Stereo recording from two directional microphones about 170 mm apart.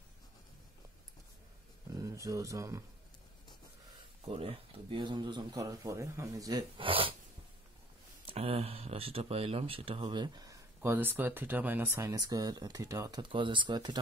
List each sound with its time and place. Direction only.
2.0 s speech: 20° right (ahead or behind)
4.3 s speech: 30° right (ahead or behind)
8.3 s speech: 35° right (ahead or behind)